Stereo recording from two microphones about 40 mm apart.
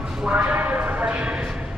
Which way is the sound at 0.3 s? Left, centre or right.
Right.